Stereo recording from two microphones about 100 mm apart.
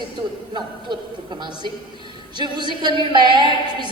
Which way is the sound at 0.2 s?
50° right (ahead or behind).